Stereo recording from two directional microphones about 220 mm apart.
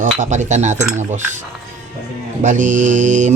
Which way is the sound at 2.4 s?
35° right (ahead or behind).